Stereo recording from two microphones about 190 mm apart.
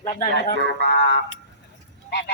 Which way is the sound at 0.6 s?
70° right (ahead or behind).